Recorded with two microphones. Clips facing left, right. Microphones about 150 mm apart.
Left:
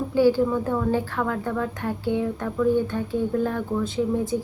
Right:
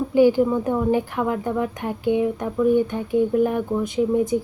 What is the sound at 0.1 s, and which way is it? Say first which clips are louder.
A woman's voice: right 3 dB; 15° right (ahead or behind).